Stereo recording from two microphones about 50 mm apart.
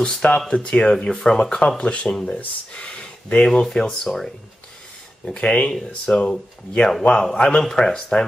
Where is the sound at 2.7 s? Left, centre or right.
Left.